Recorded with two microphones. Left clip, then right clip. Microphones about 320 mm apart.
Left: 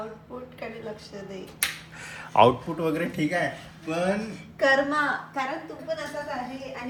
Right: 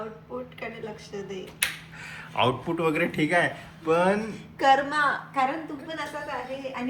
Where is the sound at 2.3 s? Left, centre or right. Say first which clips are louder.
Left 6 dB; left.